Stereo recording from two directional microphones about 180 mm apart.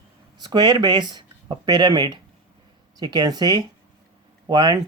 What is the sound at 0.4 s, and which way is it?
Speech, 25° right (ahead or behind).